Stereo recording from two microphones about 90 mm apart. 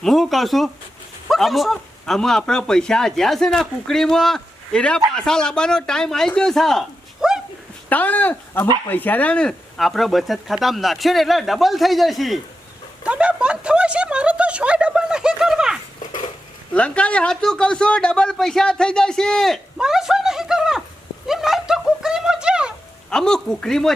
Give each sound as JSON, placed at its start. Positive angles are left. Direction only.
{"t": 0.0, "sound": "speech", "side_deg": 0}
{"t": 7.2, "sound": "a sound", "side_deg": -10}
{"t": 7.9, "sound": "speech", "side_deg": 20}
{"t": 13.1, "sound": "speech", "side_deg": -10}
{"t": 16.7, "sound": "speech", "side_deg": 15}
{"t": 19.8, "sound": "speech", "side_deg": -5}
{"t": 23.0, "sound": "speech", "side_deg": 5}